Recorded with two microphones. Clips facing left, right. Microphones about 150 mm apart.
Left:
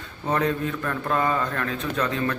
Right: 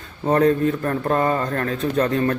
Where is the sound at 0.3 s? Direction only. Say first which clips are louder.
Right 7 dB; 45° right (ahead or behind).